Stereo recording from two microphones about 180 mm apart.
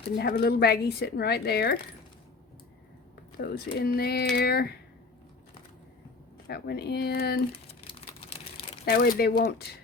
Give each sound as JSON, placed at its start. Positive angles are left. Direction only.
{"t": 0.2, "sound": "speech", "side_deg": 60}
{"t": 3.3, "sound": "speech", "side_deg": 60}
{"t": 6.5, "sound": "speech", "side_deg": 60}
{"t": 7.7, "sound": "a sound", "side_deg": 30}
{"t": 8.8, "sound": "speech", "side_deg": 60}